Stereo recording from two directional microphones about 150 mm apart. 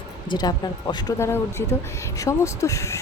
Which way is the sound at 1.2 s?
15° left (ahead or behind).